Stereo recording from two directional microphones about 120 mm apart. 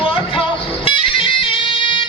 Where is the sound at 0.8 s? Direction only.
50° left (ahead or behind).